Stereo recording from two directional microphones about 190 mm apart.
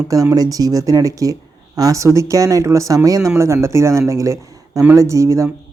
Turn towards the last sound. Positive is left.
turn(degrees=-15)  # may be behind; listen again after turning